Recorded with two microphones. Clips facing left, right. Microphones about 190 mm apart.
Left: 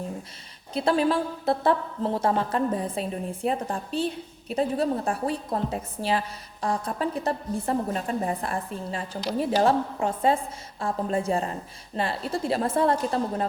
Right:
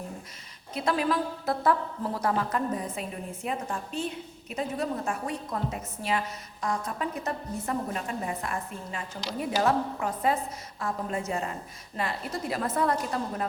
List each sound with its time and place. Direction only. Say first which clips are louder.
0.7 s a woman's voice: left 4 dB; 30° left (ahead or behind)